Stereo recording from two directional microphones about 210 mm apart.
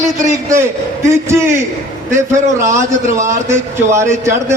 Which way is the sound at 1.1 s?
10° right (ahead or behind).